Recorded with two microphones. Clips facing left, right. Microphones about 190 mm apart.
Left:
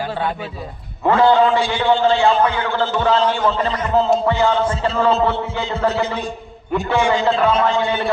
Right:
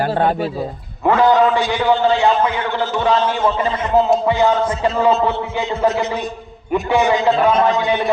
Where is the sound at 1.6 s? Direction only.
30° left (ahead or behind).